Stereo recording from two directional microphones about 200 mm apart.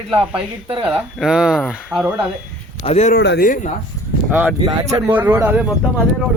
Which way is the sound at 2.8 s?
35° left (ahead or behind).